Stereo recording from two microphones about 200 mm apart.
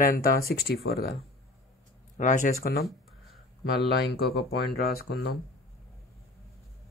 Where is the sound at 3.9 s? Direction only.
55° left (ahead or behind).